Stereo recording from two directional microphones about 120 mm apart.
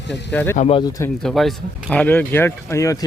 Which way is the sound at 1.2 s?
Centre (ahead or behind).